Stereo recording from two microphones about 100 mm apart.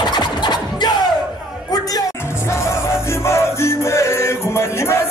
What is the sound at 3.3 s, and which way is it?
Music, 25° left (ahead or behind).